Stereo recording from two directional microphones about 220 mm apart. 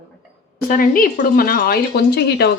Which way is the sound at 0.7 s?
40° left (ahead or behind).